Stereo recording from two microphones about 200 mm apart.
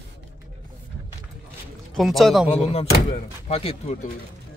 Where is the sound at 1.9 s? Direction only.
Centre (ahead or behind).